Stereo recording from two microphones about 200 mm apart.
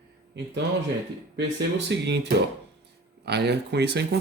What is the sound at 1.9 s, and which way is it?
A man's voice, 60° right (ahead or behind).